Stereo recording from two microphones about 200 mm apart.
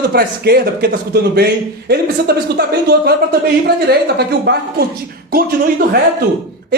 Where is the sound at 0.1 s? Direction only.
50° right (ahead or behind).